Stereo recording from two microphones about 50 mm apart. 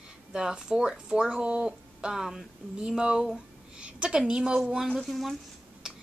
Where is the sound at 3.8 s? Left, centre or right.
Right.